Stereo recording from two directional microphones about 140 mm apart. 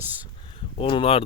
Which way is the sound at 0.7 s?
40° left (ahead or behind).